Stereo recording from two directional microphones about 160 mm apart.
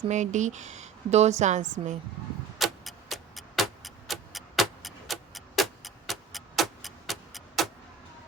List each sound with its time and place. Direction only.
0.1 s a woman's voice: 50° right (ahead or behind)
2.6 s clock: centre (ahead or behind)